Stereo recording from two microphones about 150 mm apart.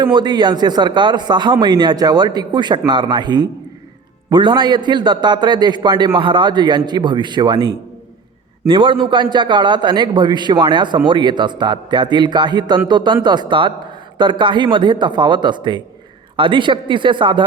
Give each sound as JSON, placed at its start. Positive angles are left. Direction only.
{"t": 0.0, "sound": "a man's voice", "side_deg": -30}